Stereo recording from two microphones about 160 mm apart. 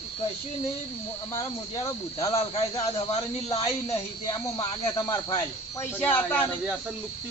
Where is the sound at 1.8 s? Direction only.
20° left (ahead or behind).